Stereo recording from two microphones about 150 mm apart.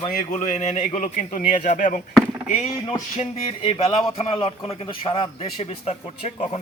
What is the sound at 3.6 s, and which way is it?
A man's voice, 40° left (ahead or behind).